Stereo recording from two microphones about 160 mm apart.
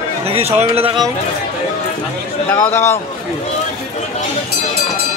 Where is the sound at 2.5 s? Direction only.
15° left (ahead or behind).